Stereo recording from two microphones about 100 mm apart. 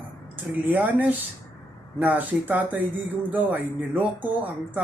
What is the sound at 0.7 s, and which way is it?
Speech, 20° right (ahead or behind).